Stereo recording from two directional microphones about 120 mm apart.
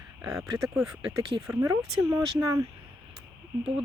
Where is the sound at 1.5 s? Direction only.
25° right (ahead or behind).